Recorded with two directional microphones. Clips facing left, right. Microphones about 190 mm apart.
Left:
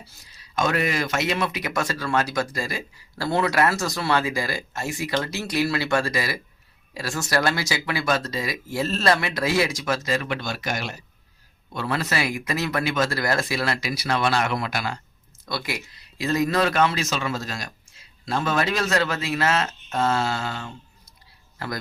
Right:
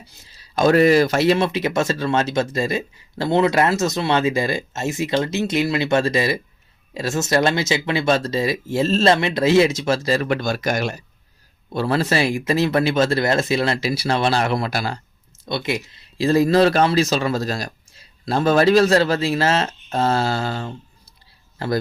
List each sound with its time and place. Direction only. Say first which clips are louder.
0.3 s speech: right 8 dB; 30° right (ahead or behind)
11.7 s speech: right 7 dB; 30° right (ahead or behind)
15.4 s speech: right 6 dB; 25° right (ahead or behind)